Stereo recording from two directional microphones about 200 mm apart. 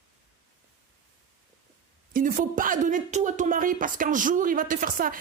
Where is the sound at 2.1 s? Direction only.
45° right (ahead or behind).